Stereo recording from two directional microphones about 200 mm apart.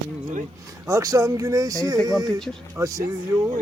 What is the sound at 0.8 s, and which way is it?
Speech, 15° right (ahead or behind).